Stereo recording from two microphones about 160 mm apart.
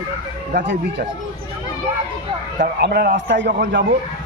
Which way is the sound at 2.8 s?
85° right.